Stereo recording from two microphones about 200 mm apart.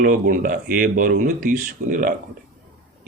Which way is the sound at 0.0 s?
45° right (ahead or behind).